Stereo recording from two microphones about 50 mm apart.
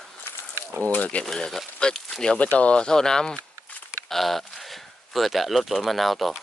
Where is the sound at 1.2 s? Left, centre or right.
Centre.